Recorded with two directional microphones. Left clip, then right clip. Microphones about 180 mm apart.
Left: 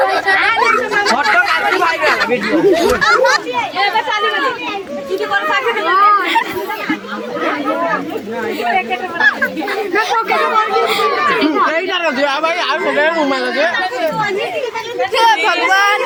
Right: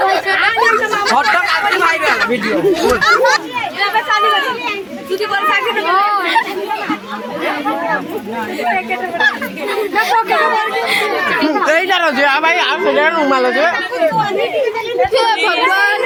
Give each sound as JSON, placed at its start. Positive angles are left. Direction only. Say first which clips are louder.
{"t": 0.0, "sound": "a sound", "louder": "even", "side_deg": 0}
{"t": 2.0, "sound": "speech", "louder": "even", "side_deg": 0}
{"t": 5.5, "sound": "children playing", "louder": "right 2 dB", "side_deg": 0}
{"t": 10.0, "sound": "speech", "louder": "right 2 dB", "side_deg": -20}
{"t": 11.6, "sound": "speech", "louder": "right 2 dB", "side_deg": -75}
{"t": 15.1, "sound": "speech", "louder": "left 4 dB", "side_deg": 15}